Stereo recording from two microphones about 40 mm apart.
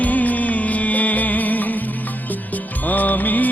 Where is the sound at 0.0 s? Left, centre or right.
Left.